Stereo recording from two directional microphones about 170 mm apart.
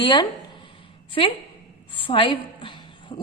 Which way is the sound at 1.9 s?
30° left (ahead or behind).